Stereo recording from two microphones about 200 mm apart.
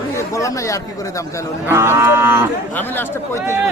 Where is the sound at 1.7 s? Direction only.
15° right (ahead or behind).